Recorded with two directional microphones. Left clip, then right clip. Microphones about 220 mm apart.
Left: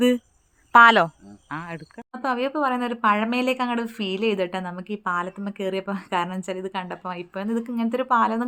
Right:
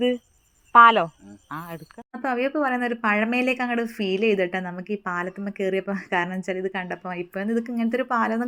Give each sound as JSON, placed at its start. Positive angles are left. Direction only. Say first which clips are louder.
{"t": 0.7, "sound": "speech", "louder": "even", "side_deg": 25}
{"t": 2.2, "sound": "a woman's voice", "louder": "even", "side_deg": -5}